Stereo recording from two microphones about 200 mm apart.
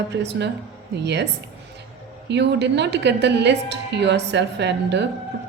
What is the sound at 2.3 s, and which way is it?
A woman's voice, 60° right (ahead or behind).